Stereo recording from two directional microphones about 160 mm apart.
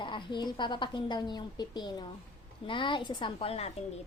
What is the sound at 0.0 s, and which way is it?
A woman's voice, 30° left (ahead or behind).